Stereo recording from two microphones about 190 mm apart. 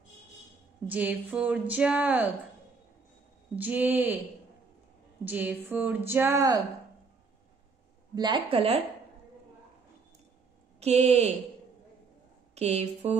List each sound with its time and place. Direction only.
0.8 s a woman's voice: 10° right (ahead or behind)
3.5 s a woman's voice: 10° right (ahead or behind)
5.2 s a woman's voice: 10° right (ahead or behind)
8.1 s a woman's voice: 20° right (ahead or behind)
10.8 s speech: 35° right (ahead or behind)
12.5 s speech: 35° right (ahead or behind)